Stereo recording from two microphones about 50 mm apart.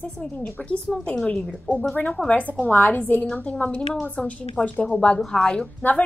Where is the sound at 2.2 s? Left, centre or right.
Centre.